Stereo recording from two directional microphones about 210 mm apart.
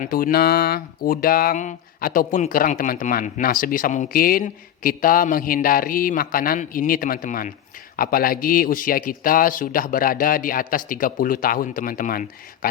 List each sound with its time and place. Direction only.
0.0 s speech: 45° left (ahead or behind)